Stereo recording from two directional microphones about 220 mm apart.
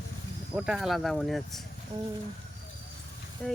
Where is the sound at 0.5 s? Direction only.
Centre (ahead or behind).